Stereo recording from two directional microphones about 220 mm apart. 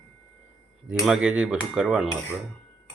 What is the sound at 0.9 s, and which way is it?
Speech, 5° right (ahead or behind).